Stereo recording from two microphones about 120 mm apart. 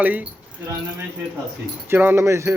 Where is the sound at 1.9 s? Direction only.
15° right (ahead or behind).